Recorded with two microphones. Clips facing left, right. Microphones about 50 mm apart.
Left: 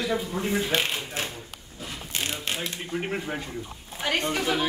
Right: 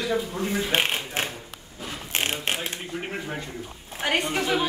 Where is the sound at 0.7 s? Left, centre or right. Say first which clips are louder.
Right 2 dB; right.